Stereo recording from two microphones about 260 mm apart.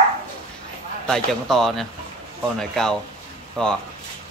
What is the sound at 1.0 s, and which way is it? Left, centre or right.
Speech, centre.